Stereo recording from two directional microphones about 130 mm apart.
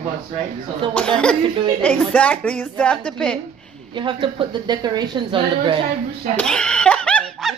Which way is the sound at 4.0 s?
40° right (ahead or behind).